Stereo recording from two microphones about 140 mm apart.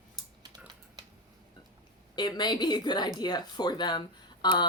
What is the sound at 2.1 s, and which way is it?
Speech, 30° left (ahead or behind).